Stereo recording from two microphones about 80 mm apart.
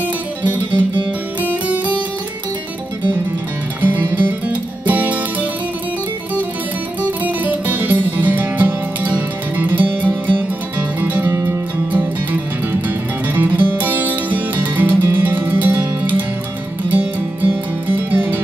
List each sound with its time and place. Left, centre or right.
0.7 s music: right
1.4 s music: centre
3.8 s music: right
7.0 s music: right